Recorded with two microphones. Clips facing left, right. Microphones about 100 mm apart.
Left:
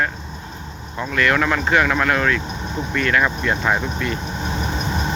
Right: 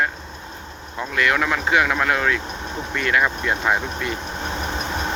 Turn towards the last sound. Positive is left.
turn(degrees=-10)  # may be behind; listen again after turning